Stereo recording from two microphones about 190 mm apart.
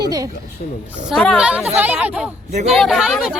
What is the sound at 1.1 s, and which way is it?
A woman's voice, centre (ahead or behind).